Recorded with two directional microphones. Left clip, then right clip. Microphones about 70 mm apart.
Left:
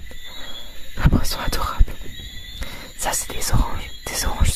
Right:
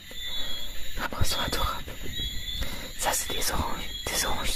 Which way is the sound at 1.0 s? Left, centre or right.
Left.